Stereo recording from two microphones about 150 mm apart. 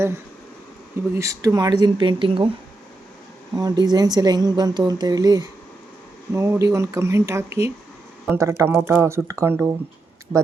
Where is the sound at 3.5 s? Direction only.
25° right (ahead or behind).